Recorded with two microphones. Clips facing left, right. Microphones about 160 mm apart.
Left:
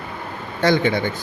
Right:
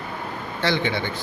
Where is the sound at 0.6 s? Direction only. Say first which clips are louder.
Left 6 dB; 45° left (ahead or behind).